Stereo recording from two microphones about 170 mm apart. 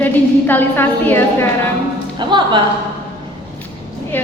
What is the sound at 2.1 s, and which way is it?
Speech, 25° right (ahead or behind).